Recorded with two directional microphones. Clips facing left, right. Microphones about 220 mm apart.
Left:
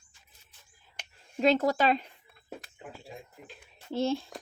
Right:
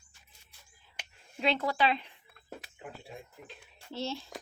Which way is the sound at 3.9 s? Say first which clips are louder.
Left 8 dB; 50° left (ahead or behind).